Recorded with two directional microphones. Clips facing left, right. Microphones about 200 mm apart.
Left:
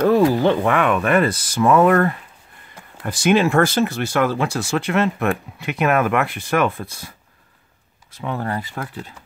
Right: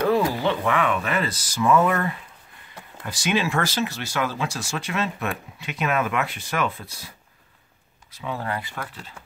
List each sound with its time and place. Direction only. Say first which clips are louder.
0.0 s speech: left 6 dB; 45° left (ahead or behind)
8.2 s speech: left 5 dB; 55° left (ahead or behind)
8.5 s speech: left 4 dB; 40° left (ahead or behind)